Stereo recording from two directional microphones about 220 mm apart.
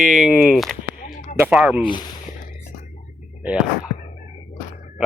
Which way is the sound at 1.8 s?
20° left (ahead or behind).